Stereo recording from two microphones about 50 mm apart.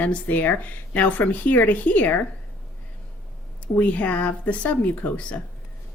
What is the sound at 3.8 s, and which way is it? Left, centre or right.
Speech, left.